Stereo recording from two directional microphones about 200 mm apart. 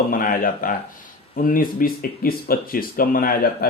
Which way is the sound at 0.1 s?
45° left (ahead or behind).